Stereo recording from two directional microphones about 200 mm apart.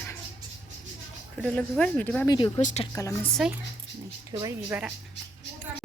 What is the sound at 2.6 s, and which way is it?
Speech, 40° left (ahead or behind).